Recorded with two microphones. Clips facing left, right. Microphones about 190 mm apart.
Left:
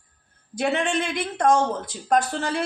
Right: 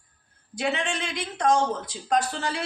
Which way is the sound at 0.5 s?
55° left (ahead or behind).